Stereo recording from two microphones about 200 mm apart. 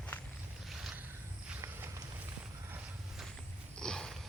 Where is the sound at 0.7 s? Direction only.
Centre (ahead or behind).